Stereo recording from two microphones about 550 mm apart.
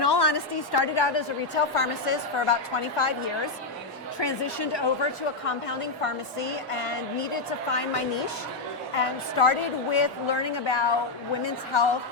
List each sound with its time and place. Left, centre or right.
0.0 s a woman's voice: left
4.2 s a woman's voice: left
5.5 s a woman's voice: left
9.0 s a woman's voice: left